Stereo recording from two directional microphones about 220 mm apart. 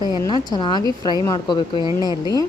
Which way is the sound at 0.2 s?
20° left (ahead or behind).